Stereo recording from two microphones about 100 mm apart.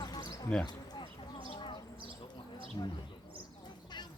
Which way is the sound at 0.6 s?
45° left (ahead or behind).